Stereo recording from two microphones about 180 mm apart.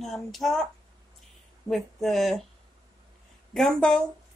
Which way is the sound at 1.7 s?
Centre (ahead or behind).